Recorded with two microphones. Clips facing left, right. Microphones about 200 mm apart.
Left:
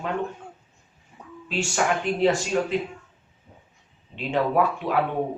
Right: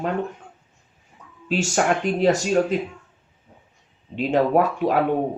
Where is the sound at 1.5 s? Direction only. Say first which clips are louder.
Right 4 dB; 40° right (ahead or behind).